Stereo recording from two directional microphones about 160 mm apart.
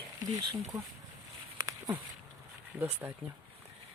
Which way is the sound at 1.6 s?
20° right (ahead or behind).